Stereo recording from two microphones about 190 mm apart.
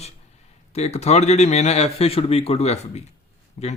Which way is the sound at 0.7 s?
35° left (ahead or behind).